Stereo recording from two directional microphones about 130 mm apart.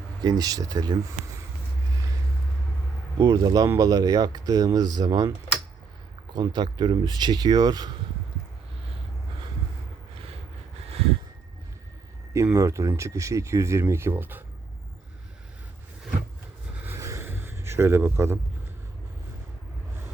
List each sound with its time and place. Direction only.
0.2 s speech: 30° right (ahead or behind)
3.2 s speech: 25° right (ahead or behind)
6.3 s speech: 35° right (ahead or behind)
12.3 s speech: 25° right (ahead or behind)
16.8 s a sound: 20° right (ahead or behind)